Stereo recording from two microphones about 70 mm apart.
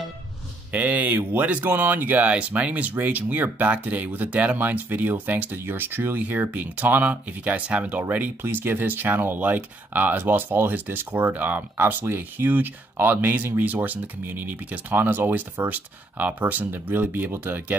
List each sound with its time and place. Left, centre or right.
0.7 s speech: right